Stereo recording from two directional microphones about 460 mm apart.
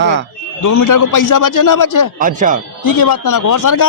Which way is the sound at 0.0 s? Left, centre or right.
Right.